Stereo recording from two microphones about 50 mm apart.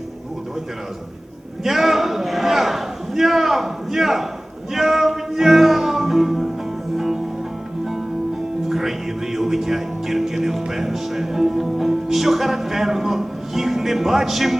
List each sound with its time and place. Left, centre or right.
1.6 s a sound: centre
4.7 s music: centre
8.7 s music: centre